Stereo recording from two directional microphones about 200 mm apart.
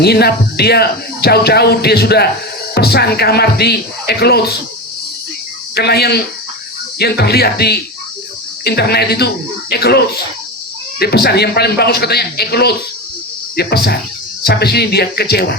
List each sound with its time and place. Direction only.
0.0 s speech: 55° left (ahead or behind)
5.7 s speech: 55° left (ahead or behind)
11.0 s speech: 55° left (ahead or behind)